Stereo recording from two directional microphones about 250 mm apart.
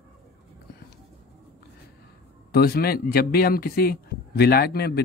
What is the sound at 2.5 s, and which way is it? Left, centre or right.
Speech, left.